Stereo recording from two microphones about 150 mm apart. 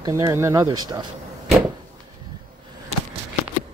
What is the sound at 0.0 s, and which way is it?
Speech, 20° right (ahead or behind).